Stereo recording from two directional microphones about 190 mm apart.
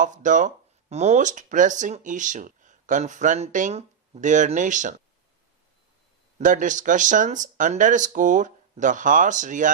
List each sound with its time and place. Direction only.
0.0 s speech: 40° right (ahead or behind)
6.4 s speech: 40° right (ahead or behind)